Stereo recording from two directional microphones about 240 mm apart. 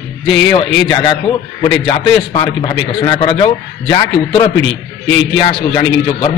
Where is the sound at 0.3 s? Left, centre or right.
Left.